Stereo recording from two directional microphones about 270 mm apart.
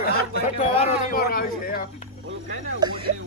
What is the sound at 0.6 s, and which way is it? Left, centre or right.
Speech, left.